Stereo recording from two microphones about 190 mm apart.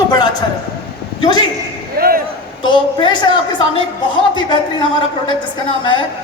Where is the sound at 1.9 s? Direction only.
50° right (ahead or behind).